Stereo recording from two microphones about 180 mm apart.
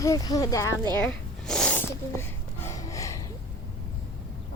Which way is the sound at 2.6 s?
20° left (ahead or behind).